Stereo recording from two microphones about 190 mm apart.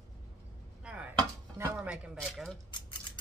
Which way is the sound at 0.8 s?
5° right (ahead or behind).